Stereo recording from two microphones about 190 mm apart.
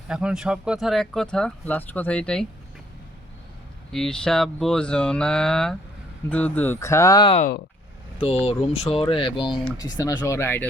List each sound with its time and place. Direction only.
0.1 s speech: 5° right (ahead or behind)
3.9 s speech: 5° left (ahead or behind)